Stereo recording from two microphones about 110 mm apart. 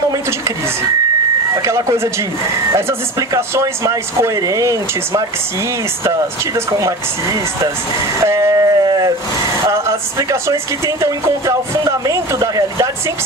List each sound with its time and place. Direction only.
0.1 s speech: 30° right (ahead or behind)
1.5 s speech: 25° right (ahead or behind)
6.7 s speech: 30° right (ahead or behind)
8.2 s a sound: 25° right (ahead or behind)
9.6 s speech: 25° right (ahead or behind)